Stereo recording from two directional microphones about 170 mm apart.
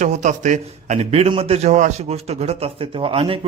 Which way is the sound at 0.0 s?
45° right (ahead or behind).